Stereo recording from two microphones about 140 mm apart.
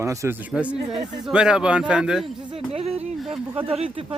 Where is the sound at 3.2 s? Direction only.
Centre (ahead or behind).